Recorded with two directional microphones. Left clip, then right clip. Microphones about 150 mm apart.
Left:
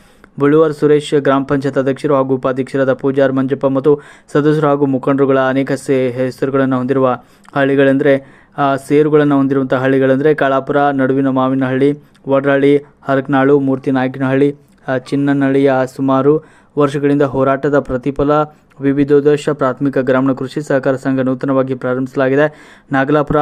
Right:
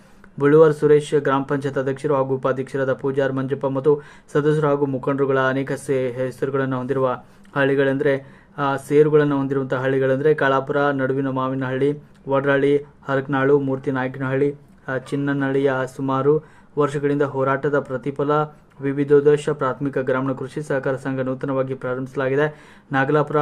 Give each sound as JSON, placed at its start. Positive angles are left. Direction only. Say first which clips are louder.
{"t": 0.3, "sound": "speech", "louder": "left 3 dB", "side_deg": 30}